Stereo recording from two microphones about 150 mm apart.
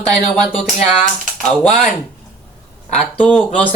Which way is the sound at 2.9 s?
5° left (ahead or behind).